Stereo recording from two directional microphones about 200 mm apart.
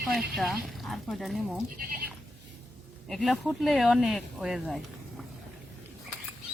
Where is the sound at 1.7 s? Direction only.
45° right (ahead or behind).